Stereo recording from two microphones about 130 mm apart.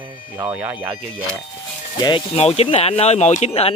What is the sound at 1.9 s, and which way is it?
Speech, 35° left (ahead or behind).